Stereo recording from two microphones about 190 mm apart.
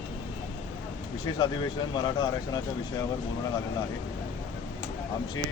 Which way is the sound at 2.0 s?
25° left (ahead or behind).